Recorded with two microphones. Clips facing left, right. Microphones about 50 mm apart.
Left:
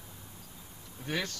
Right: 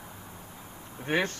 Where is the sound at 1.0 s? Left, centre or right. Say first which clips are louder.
Right 7 dB; right.